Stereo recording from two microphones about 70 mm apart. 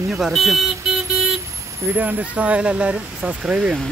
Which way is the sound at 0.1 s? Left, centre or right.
Centre.